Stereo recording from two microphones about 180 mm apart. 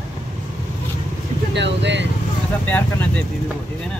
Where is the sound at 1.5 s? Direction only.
75° right (ahead or behind).